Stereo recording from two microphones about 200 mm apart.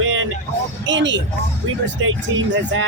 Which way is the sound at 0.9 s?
65° right (ahead or behind).